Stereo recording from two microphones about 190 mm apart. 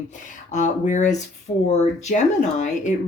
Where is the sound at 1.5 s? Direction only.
30° left (ahead or behind).